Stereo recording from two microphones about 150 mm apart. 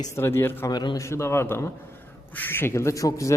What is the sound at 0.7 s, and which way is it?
A man's voice, 30° left (ahead or behind).